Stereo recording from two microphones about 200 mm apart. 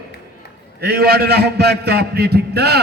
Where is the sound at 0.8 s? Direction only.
50° right (ahead or behind).